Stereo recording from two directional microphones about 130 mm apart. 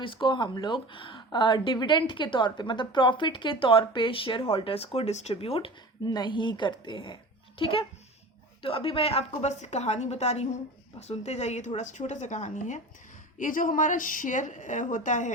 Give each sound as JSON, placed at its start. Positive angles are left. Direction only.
{"t": 0.0, "sound": "a child's voice", "side_deg": 40}
{"t": 13.4, "sound": "a woman's voice", "side_deg": 90}